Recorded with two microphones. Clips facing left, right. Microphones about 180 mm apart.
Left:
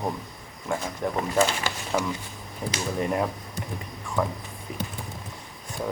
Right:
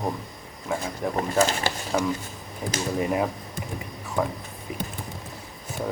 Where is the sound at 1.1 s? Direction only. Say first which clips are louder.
Right 1 dB; 40° right (ahead or behind).